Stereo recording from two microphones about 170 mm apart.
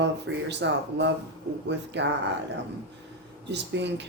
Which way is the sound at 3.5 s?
90° right.